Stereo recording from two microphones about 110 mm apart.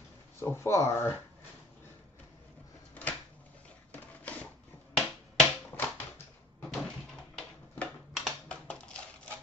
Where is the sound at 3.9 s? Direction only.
15° left (ahead or behind).